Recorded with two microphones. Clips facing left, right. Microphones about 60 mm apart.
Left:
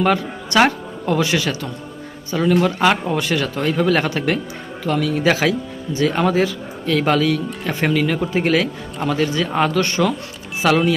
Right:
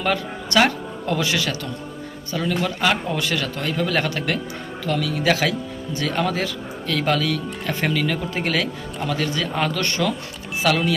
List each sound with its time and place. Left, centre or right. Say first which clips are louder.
0.0 s speech: left 5 dB; centre